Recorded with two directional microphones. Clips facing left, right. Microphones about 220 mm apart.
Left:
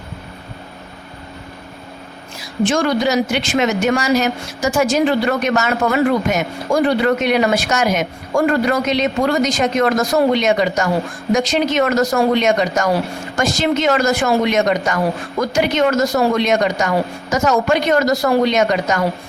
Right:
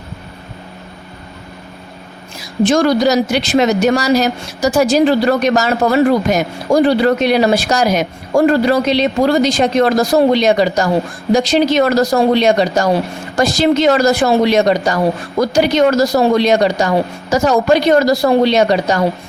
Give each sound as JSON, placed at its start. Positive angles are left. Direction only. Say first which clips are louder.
{"t": 2.6, "sound": "speech", "louder": "right 5 dB", "side_deg": -40}